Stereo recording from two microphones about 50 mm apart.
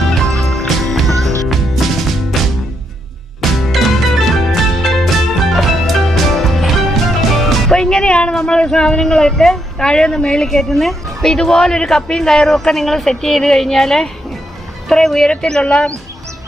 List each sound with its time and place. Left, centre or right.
0.3 s music: centre
7.7 s music: centre
8.4 s speech: centre
15.4 s speech: centre